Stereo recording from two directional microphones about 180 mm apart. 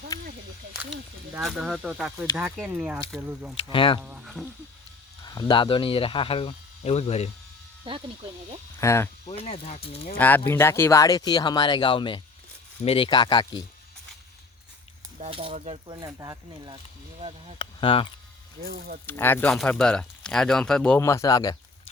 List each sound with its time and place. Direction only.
0.1 s snake: 20° left (ahead or behind)
1.4 s speech: centre (ahead or behind)
3.7 s speech: 30° left (ahead or behind)
4.0 s speech: 5° right (ahead or behind)
5.2 s speech: 25° left (ahead or behind)
7.9 s speech: 30° right (ahead or behind)
8.8 s speech: 15° left (ahead or behind)
9.2 s speech: 35° left (ahead or behind)
10.2 s speech: 10° left (ahead or behind)
15.2 s speech: 30° right (ahead or behind)
17.6 s speech: 30° left (ahead or behind)
18.6 s speech: 55° right (ahead or behind)
19.0 s speech: 10° left (ahead or behind)
21.0 s speech: 15° left (ahead or behind)